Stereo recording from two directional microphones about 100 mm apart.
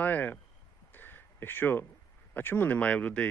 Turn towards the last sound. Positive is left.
turn(degrees=15)  # may be behind; listen again after turning